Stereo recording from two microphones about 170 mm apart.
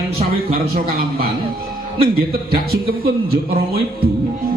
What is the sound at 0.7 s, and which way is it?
Speech, 65° right (ahead or behind).